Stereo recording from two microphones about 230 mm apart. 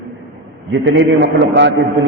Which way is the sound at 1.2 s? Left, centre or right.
Right.